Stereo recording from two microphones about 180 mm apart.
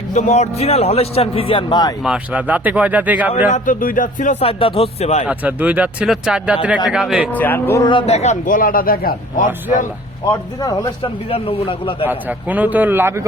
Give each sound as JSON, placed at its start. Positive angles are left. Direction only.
{"t": 0.1, "sound": "a man's voice", "side_deg": 40}
{"t": 2.0, "sound": "speech", "side_deg": -5}
{"t": 3.5, "sound": "a man's voice", "side_deg": 50}
{"t": 5.3, "sound": "a man's voice", "side_deg": -10}
{"t": 7.3, "sound": "speech", "side_deg": 10}
{"t": 7.9, "sound": "a man's voice", "side_deg": 30}
{"t": 10.3, "sound": "speech", "side_deg": 20}
{"t": 11.3, "sound": "a man's voice", "side_deg": 35}
{"t": 12.0, "sound": "speech", "side_deg": -10}